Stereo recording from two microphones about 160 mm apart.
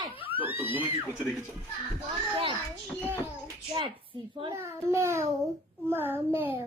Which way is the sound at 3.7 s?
30° right (ahead or behind).